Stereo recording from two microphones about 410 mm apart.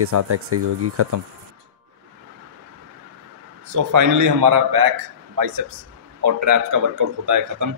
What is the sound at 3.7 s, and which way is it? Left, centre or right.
A man's voice, right.